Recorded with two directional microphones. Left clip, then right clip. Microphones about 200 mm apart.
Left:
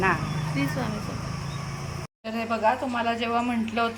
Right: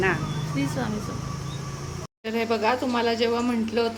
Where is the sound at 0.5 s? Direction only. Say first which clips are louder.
Right 1 dB; 20° right (ahead or behind).